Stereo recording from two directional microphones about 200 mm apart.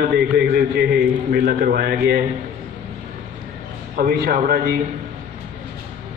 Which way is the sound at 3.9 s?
50° right (ahead or behind).